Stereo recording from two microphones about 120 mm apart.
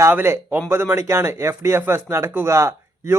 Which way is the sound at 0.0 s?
20° right (ahead or behind).